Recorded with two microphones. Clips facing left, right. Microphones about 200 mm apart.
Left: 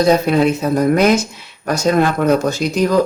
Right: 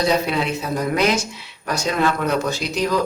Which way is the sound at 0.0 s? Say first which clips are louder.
Left 7 dB; 45° left (ahead or behind).